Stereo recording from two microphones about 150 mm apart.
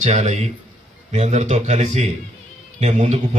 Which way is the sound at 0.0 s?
50° right (ahead or behind).